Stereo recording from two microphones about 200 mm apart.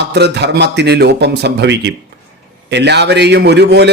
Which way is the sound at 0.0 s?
55° right (ahead or behind).